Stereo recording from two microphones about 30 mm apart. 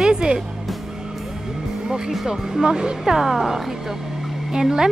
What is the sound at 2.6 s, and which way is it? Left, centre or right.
Speech, right.